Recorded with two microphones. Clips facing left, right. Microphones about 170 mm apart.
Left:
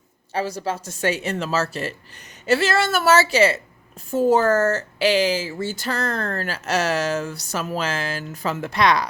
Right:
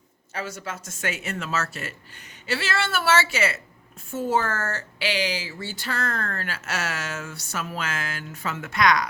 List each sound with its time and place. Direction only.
0.3 s speech: 35° left (ahead or behind)